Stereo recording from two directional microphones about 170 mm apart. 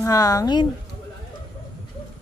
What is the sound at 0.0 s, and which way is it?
Speech, 20° left (ahead or behind).